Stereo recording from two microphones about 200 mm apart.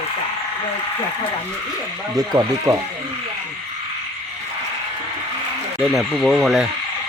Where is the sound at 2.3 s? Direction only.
20° right (ahead or behind).